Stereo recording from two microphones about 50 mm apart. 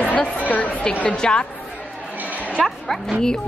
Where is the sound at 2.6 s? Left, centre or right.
Centre.